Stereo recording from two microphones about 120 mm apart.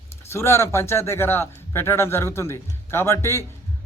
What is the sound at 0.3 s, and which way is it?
A man's voice, 20° left (ahead or behind).